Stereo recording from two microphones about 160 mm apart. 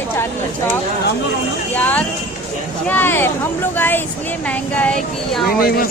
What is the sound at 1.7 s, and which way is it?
Speech, 10° left (ahead or behind).